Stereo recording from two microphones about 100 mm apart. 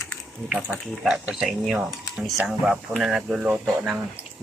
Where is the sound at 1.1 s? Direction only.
Centre (ahead or behind).